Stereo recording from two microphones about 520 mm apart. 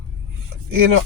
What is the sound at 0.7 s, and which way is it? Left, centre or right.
Speech, right.